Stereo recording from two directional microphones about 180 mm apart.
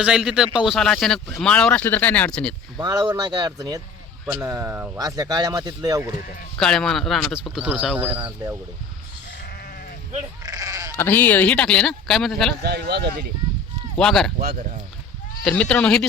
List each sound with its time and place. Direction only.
0.0 s speech: 5° right (ahead or behind)
2.7 s speech: 20° right (ahead or behind)
6.6 s speech: centre (ahead or behind)
10.4 s goat: 20° right (ahead or behind)
10.9 s speech: 10° left (ahead or behind)
12.6 s speech: 60° right (ahead or behind)
14.0 s speech: centre (ahead or behind)
14.3 s speech: 45° right (ahead or behind)
15.4 s speech: 5° left (ahead or behind)